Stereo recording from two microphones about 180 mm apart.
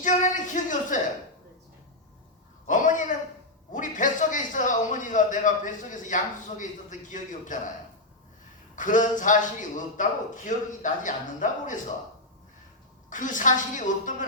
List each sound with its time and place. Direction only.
0.0 s a man's voice: 45° left (ahead or behind)
2.6 s a sound: 45° left (ahead or behind)
3.7 s a man's voice: 45° left (ahead or behind)
8.7 s a man's voice: 45° left (ahead or behind)
13.1 s a man's voice: 45° left (ahead or behind)